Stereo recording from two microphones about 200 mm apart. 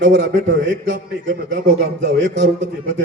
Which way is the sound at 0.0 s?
75° right (ahead or behind).